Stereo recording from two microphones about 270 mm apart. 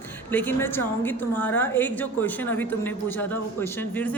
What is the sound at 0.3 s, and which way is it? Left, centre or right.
A woman's voice, centre.